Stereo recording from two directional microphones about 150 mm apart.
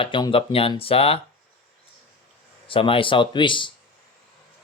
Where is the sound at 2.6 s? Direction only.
35° left (ahead or behind).